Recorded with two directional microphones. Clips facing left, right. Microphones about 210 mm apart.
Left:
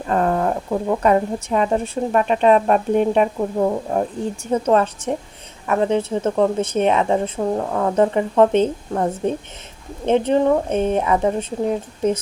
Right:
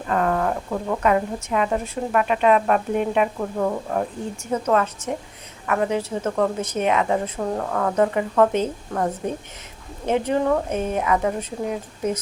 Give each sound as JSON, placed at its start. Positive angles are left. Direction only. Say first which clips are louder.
{"t": 0.1, "sound": "a woman's voice", "louder": "left 3 dB", "side_deg": 30}